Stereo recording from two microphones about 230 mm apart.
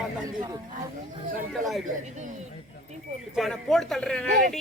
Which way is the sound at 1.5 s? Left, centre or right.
Centre.